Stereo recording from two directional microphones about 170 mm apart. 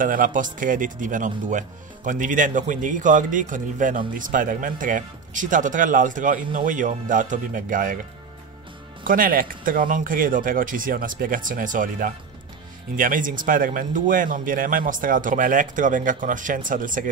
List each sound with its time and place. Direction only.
0.0 s speech: 55° right (ahead or behind)
9.0 s speech: 55° right (ahead or behind)